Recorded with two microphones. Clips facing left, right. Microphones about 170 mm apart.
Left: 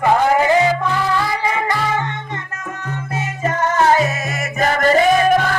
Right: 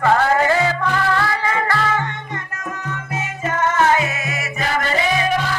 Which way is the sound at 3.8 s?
40° left (ahead or behind).